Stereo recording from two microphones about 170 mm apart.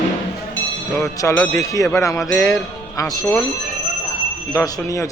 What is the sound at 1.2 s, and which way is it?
A man's voice, 20° left (ahead or behind).